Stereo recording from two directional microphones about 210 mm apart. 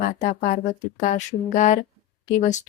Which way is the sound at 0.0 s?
35° left (ahead or behind).